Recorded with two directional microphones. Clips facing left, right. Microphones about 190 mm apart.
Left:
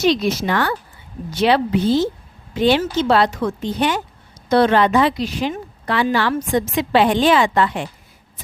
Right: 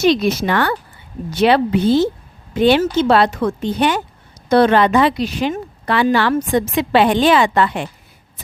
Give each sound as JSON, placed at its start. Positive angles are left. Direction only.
{"t": 0.0, "sound": "a woman's voice", "side_deg": -60}